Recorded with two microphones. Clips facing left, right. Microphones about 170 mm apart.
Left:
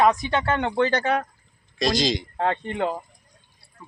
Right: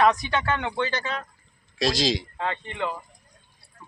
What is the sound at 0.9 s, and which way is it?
Speech, 60° left (ahead or behind).